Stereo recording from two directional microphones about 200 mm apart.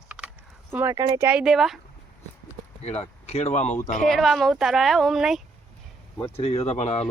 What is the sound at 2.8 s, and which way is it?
Speech, 30° left (ahead or behind).